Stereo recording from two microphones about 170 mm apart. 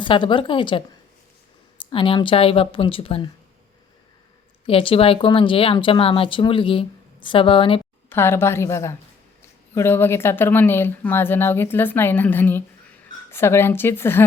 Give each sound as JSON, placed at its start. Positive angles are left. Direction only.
{"t": 0.0, "sound": "a woman's voice", "side_deg": 30}
{"t": 1.8, "sound": "speech", "side_deg": 30}
{"t": 4.6, "sound": "speech", "side_deg": 30}
{"t": 8.1, "sound": "speech", "side_deg": 15}